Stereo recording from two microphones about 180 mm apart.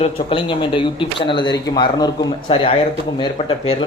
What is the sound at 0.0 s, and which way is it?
Speech, 30° left (ahead or behind).